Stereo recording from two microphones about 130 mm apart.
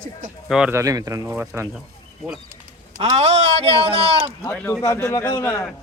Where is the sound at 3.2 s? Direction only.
55° right (ahead or behind).